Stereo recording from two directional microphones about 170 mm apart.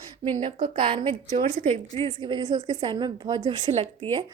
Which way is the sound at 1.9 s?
30° right (ahead or behind).